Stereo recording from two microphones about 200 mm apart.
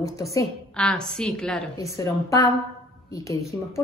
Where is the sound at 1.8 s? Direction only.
15° left (ahead or behind).